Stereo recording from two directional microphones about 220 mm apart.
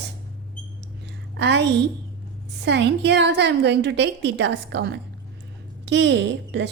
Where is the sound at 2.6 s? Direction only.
50° right (ahead or behind).